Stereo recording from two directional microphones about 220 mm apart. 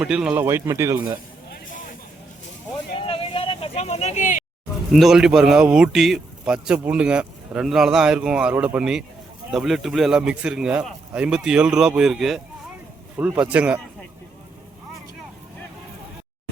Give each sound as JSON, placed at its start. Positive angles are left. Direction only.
{"t": 0.0, "sound": "a man's voice", "side_deg": -5}
{"t": 3.1, "sound": "a sound", "side_deg": 25}
{"t": 4.9, "sound": "a man's voice", "side_deg": 0}